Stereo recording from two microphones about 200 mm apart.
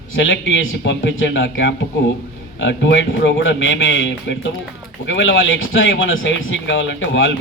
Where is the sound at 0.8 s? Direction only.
65° left (ahead or behind).